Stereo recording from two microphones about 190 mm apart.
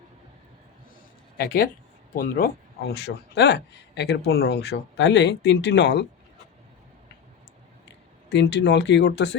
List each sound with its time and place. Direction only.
1.4 s a man's voice: 50° left (ahead or behind)
8.3 s a man's voice: 65° left (ahead or behind)